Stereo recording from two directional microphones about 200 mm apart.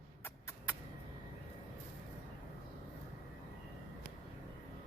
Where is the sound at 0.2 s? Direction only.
10° left (ahead or behind).